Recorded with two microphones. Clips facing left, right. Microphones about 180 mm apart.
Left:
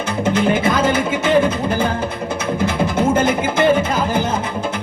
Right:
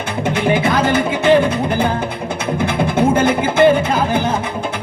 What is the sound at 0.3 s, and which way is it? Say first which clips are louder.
Music: right 1 dB; 65° right (ahead or behind).